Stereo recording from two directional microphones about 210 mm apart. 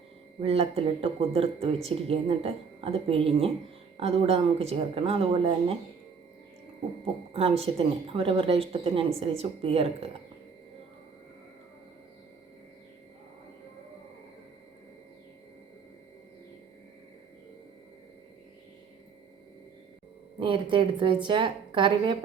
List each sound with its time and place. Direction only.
0.4 s speech: 30° right (ahead or behind)
7.0 s speech: 30° right (ahead or behind)
20.4 s speech: 25° right (ahead or behind)